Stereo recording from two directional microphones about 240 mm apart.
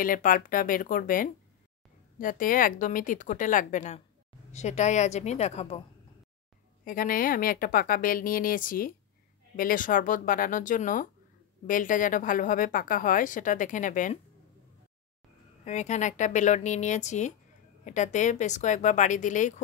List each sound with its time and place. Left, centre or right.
0.0 s a woman's voice: left
6.8 s a woman's voice: left
15.6 s a woman's voice: left